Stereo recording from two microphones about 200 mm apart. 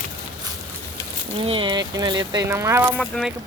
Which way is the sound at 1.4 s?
25° right (ahead or behind).